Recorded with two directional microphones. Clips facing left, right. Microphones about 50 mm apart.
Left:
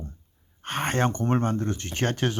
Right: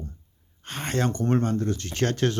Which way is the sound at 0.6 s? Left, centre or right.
Left.